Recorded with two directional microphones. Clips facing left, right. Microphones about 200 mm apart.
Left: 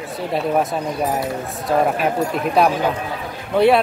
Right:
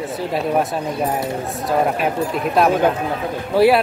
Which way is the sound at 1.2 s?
Centre (ahead or behind).